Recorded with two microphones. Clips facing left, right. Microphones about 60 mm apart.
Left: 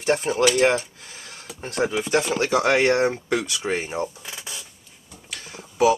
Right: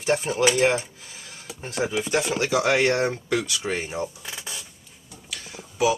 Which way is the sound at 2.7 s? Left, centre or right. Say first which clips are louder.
Left 3 dB; left.